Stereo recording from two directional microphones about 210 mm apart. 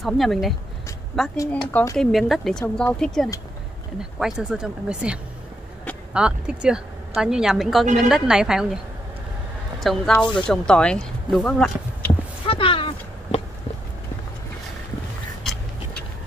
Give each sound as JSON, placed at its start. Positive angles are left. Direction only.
{"t": 0.0, "sound": "speech", "side_deg": 0}
{"t": 1.3, "sound": "speech", "side_deg": 15}
{"t": 9.8, "sound": "speech", "side_deg": 0}
{"t": 12.4, "sound": "a sound", "side_deg": 25}